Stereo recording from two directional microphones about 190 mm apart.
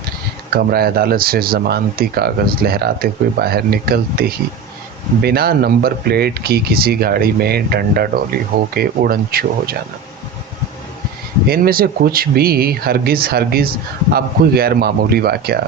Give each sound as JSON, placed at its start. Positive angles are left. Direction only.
{"t": 0.5, "sound": "speech", "side_deg": -55}
{"t": 11.4, "sound": "speech", "side_deg": -50}